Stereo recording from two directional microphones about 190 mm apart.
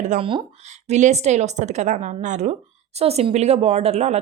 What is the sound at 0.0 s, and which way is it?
A woman's voice, 40° right (ahead or behind).